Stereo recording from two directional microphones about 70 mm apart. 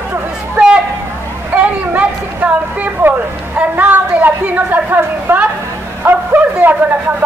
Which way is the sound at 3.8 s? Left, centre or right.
Right.